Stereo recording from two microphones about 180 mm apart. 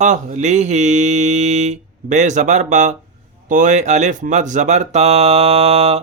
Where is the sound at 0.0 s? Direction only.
45° right (ahead or behind).